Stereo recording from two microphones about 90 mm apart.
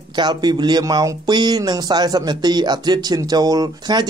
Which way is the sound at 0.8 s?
45° right (ahead or behind).